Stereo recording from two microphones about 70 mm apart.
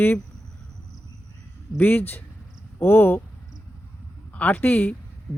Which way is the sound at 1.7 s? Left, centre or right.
Left.